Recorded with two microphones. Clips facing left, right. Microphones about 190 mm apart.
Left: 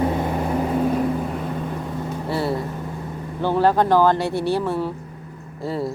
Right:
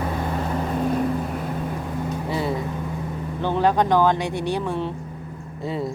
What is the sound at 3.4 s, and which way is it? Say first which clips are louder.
Speech: left 2 dB; 10° left (ahead or behind).